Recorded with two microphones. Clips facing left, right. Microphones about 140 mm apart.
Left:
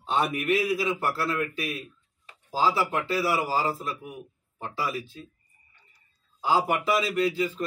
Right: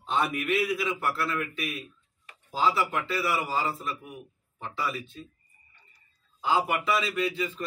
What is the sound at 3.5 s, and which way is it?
A man's voice, 30° left (ahead or behind).